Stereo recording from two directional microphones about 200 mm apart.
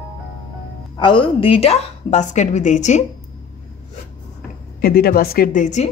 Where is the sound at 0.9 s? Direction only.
25° left (ahead or behind).